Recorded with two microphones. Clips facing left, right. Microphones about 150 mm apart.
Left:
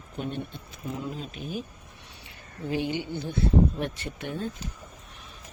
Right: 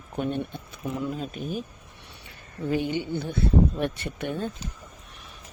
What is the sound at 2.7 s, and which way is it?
Speech, 50° right (ahead or behind).